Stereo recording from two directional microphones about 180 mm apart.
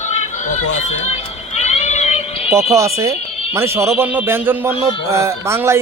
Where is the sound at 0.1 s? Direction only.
40° left (ahead or behind).